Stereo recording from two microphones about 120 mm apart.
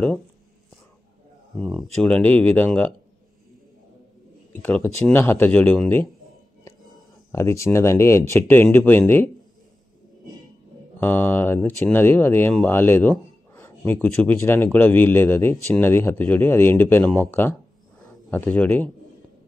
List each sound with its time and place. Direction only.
1.6 s speech: centre (ahead or behind)
4.5 s speech: 15° left (ahead or behind)
7.3 s speech: 25° left (ahead or behind)
11.0 s speech: 15° left (ahead or behind)
13.5 s a sound: 20° left (ahead or behind)
14.0 s speech: 10° left (ahead or behind)